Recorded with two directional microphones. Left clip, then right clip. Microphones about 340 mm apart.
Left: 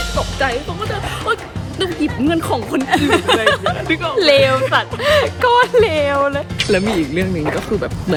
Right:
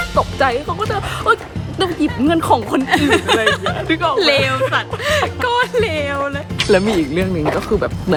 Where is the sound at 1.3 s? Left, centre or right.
Centre.